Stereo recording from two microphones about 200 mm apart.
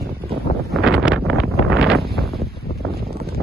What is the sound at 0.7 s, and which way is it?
Wind noise, centre (ahead or behind).